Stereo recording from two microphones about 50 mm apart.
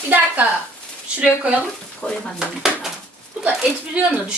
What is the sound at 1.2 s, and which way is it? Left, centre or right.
Speech, right.